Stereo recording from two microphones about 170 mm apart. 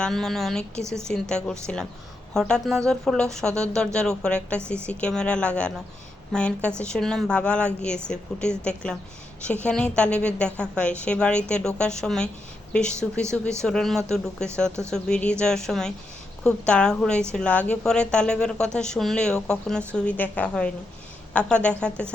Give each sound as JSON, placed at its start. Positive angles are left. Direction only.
{"t": 0.0, "sound": "a woman's voice", "side_deg": 0}
{"t": 0.8, "sound": "a woman's voice", "side_deg": -15}
{"t": 1.0, "sound": "a woman's voice", "side_deg": 5}